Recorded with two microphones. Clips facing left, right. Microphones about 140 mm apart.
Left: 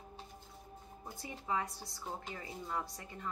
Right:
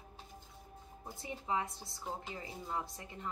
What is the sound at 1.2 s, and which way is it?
A woman's voice, 20° right (ahead or behind).